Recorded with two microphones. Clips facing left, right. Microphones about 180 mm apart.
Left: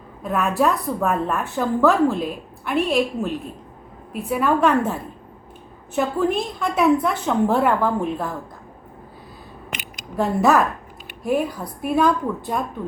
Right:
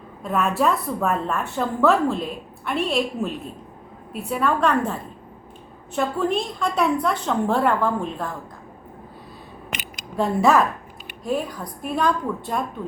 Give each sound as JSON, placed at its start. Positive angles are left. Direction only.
{"t": 0.2, "sound": "a woman's voice", "side_deg": 0}
{"t": 10.2, "sound": "a woman's voice", "side_deg": 0}